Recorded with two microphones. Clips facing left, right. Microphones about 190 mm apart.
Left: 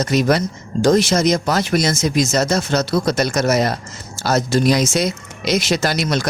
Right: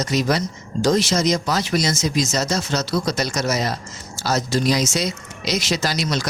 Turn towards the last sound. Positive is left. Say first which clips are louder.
# left 4 dB
turn(degrees=55)  # may be behind; listen again after turning